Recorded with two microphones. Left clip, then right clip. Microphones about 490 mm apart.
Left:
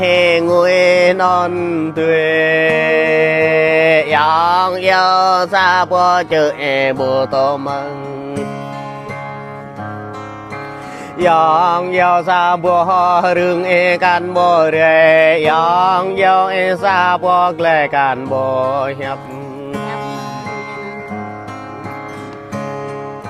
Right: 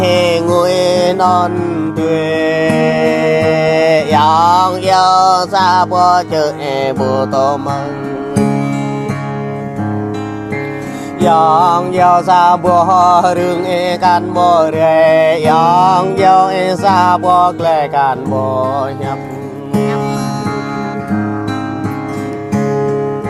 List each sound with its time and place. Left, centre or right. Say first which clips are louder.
0.0 s music: even; left
11.2 s music: right 2 dB; left